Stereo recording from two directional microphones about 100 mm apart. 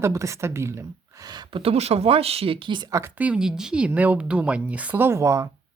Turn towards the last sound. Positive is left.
turn(degrees=-30)  # may be behind; listen again after turning